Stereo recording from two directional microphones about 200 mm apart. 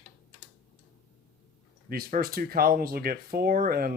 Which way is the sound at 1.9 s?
50° right (ahead or behind).